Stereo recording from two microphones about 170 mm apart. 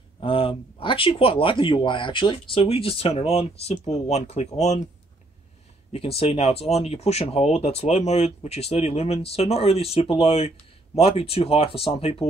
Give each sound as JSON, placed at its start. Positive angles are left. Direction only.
{"t": 0.2, "sound": "speech", "side_deg": 30}
{"t": 5.9, "sound": "speech", "side_deg": 35}